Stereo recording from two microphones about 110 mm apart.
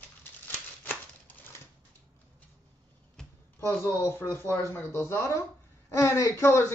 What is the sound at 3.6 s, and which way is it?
Speech, 20° left (ahead or behind).